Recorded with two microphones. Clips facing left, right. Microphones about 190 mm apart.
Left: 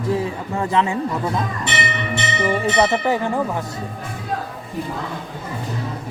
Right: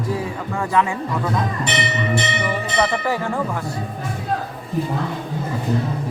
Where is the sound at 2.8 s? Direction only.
20° left (ahead or behind).